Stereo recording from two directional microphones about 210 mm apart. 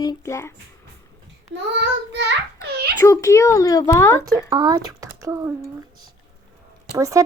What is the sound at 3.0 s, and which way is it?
Speech, 15° left (ahead or behind).